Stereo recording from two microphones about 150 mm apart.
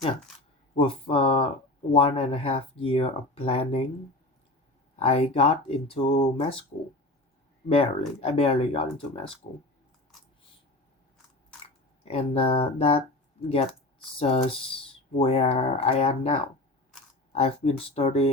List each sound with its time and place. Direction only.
0.8 s speech: 35° left (ahead or behind)
4.9 s speech: 45° left (ahead or behind)
7.7 s speech: 40° left (ahead or behind)
12.0 s speech: 40° left (ahead or behind)
14.2 s speech: 40° left (ahead or behind)